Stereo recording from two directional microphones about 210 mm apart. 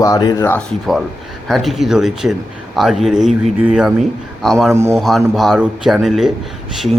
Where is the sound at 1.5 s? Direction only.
Centre (ahead or behind).